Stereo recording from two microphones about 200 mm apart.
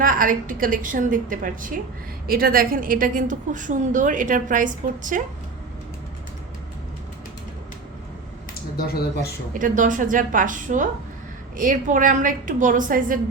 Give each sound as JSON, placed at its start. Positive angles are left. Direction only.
{"t": 0.0, "sound": "a woman's voice", "side_deg": -45}
{"t": 9.5, "sound": "a woman's voice", "side_deg": -40}